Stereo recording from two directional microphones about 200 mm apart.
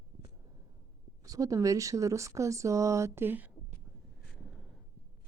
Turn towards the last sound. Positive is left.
turn(degrees=0)  # may be behind; listen again after turning